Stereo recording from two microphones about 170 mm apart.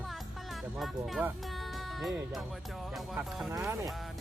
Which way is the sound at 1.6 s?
Centre (ahead or behind).